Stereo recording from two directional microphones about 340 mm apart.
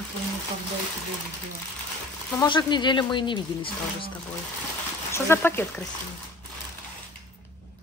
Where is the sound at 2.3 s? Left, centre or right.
Centre.